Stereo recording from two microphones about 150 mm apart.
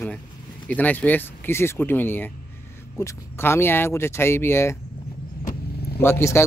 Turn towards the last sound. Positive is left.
turn(degrees=15)  # may be behind; listen again after turning